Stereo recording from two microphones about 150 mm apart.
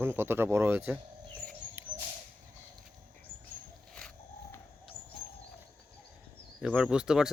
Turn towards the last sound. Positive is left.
turn(degrees=-5)  # may be behind; listen again after turning